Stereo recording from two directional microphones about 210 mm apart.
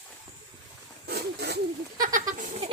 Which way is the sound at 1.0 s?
50° right (ahead or behind).